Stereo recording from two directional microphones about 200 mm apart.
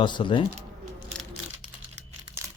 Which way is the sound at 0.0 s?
25° left (ahead or behind).